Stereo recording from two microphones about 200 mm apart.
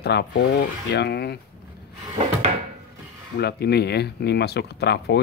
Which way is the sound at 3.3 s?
55° left (ahead or behind).